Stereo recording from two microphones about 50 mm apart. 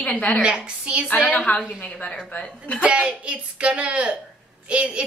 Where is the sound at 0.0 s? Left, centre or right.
Left.